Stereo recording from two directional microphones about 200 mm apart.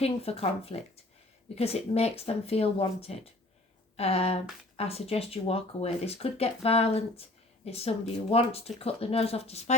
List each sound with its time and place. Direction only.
0.0 s speech: 30° left (ahead or behind)